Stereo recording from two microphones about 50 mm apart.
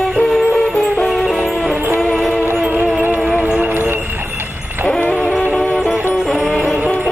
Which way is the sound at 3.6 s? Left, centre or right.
Right.